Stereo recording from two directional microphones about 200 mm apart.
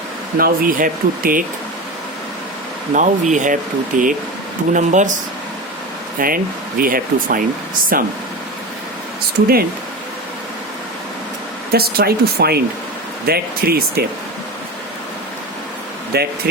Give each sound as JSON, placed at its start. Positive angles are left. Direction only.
{"t": 0.3, "sound": "speech", "side_deg": -45}
{"t": 2.9, "sound": "speech", "side_deg": -40}
{"t": 6.1, "sound": "speech", "side_deg": -45}
{"t": 11.7, "sound": "speech", "side_deg": -50}
{"t": 16.1, "sound": "speech", "side_deg": -50}